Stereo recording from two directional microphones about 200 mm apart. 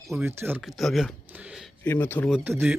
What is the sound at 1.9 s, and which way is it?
Speech, 10° left (ahead or behind).